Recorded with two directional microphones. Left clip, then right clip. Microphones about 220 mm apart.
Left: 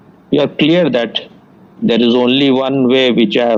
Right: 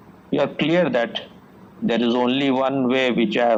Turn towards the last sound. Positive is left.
turn(degrees=50)  # may be behind; listen again after turning